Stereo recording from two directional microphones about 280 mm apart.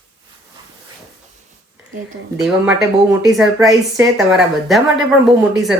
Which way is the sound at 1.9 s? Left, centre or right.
Right.